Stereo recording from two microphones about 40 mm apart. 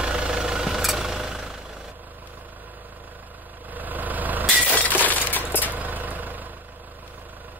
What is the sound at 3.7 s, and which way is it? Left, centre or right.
Vehicle, right.